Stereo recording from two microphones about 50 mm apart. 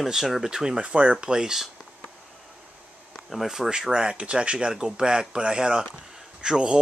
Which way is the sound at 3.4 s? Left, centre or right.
Centre.